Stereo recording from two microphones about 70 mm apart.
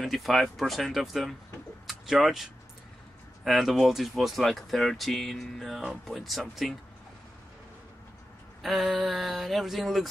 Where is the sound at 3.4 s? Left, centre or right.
Centre.